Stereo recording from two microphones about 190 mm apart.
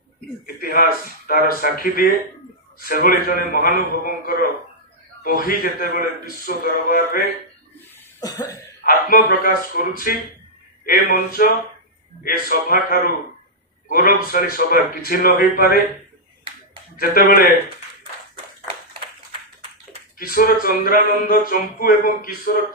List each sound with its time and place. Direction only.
0.4 s speech: 50° left (ahead or behind)
8.2 s cough: 20° left (ahead or behind)
8.8 s speech: 50° left (ahead or behind)
17.0 s speech: 50° left (ahead or behind)
20.1 s speech: 50° left (ahead or behind)